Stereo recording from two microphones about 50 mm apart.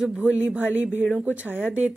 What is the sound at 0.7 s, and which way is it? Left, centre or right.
Speech, right.